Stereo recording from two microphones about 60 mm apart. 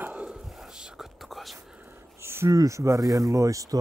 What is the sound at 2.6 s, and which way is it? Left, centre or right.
Speech, right.